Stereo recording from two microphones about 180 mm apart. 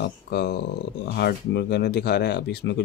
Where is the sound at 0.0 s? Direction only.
65° left (ahead or behind).